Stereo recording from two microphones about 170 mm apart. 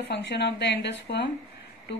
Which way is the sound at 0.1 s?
90° left.